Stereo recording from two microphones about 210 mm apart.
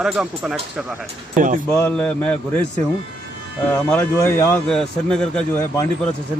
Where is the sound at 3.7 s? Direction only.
10° left (ahead or behind).